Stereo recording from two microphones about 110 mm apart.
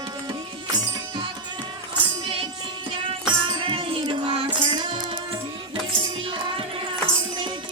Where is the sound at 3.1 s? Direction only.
50° right (ahead or behind).